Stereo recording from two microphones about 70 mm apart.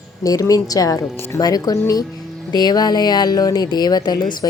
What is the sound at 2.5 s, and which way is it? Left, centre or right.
Speech, left.